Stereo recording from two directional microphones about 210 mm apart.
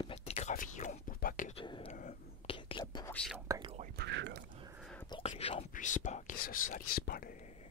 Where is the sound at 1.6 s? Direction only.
25° left (ahead or behind).